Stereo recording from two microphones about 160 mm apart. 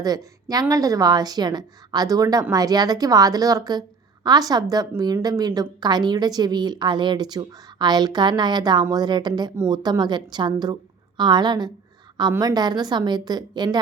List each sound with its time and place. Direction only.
0.0 s a woman's voice: 25° right (ahead or behind)